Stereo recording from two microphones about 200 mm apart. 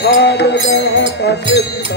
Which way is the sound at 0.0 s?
55° left (ahead or behind).